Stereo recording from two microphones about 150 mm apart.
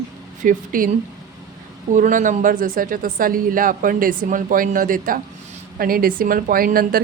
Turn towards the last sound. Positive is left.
turn(degrees=-75)  # may be behind; listen again after turning